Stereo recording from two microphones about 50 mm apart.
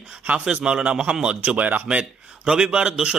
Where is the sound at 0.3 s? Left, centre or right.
Right.